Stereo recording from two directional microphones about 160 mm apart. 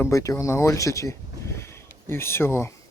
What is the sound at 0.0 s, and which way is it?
Speech, 20° left (ahead or behind).